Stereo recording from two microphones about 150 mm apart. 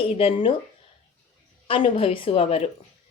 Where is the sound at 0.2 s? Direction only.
40° left (ahead or behind).